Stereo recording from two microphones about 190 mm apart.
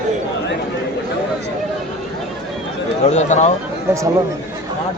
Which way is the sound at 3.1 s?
40° left (ahead or behind).